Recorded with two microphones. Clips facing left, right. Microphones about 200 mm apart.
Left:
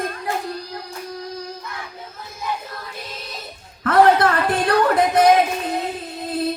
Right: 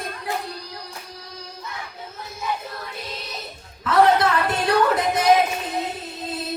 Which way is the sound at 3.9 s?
55° left (ahead or behind).